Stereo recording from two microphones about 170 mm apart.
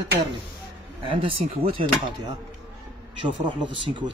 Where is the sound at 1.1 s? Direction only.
30° right (ahead or behind).